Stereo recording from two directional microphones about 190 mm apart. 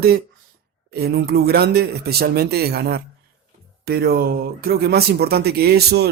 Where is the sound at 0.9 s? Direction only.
55° right (ahead or behind).